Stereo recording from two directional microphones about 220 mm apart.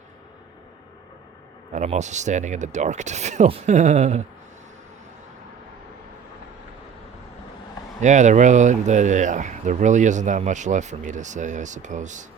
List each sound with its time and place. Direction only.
1.7 s speech: 30° right (ahead or behind)
8.0 s speech: 35° right (ahead or behind)